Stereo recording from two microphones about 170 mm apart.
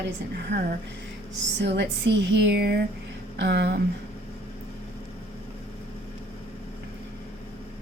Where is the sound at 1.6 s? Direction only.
90° right.